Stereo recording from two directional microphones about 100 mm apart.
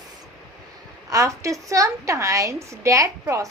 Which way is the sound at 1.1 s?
30° right (ahead or behind).